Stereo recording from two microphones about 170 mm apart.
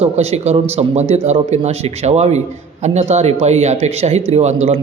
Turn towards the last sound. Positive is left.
turn(degrees=-40)  # may be behind; listen again after turning